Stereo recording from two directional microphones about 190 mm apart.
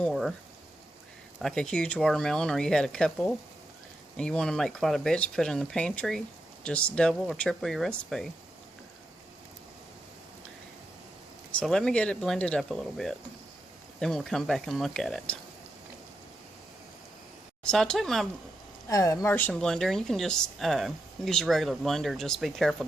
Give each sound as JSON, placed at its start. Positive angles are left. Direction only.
{"t": 0.0, "sound": "speech", "side_deg": 0}
{"t": 1.4, "sound": "speech", "side_deg": 5}
{"t": 11.5, "sound": "speech", "side_deg": 5}
{"t": 17.7, "sound": "speech", "side_deg": 5}
{"t": 18.9, "sound": "speech", "side_deg": 15}